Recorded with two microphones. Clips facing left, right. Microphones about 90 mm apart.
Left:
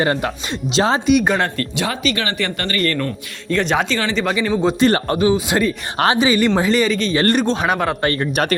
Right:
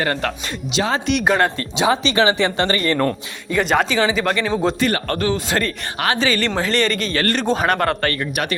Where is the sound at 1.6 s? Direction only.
20° right (ahead or behind).